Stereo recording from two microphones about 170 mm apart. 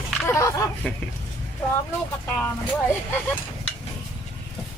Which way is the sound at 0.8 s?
5° left (ahead or behind).